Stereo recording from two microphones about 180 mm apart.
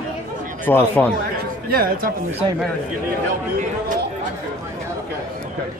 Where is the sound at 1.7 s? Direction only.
55° right (ahead or behind).